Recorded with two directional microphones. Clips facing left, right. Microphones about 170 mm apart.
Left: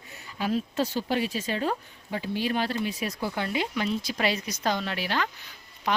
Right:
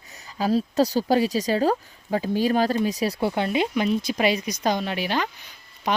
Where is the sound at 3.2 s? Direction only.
20° right (ahead or behind).